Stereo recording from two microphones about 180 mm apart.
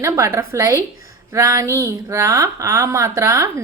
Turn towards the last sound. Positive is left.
turn(degrees=-20)  # may be behind; listen again after turning